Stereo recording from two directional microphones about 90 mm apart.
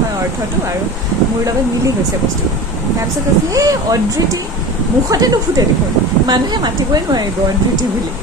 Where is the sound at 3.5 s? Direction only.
40° right (ahead or behind).